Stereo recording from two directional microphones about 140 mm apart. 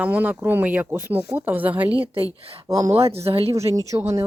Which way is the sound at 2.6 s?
25° right (ahead or behind).